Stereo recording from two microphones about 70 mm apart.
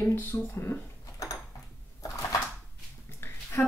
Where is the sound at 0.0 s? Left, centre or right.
Left.